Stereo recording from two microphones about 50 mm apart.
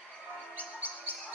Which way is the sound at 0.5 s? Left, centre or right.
Right.